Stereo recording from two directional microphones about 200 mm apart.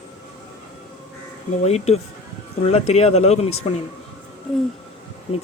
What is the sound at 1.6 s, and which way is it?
Speech, 30° left (ahead or behind).